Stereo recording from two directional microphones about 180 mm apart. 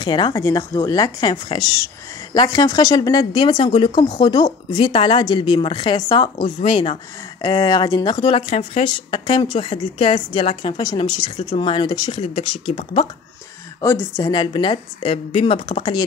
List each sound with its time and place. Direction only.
0.0 s speech: 25° left (ahead or behind)
14.1 s speech: 25° left (ahead or behind)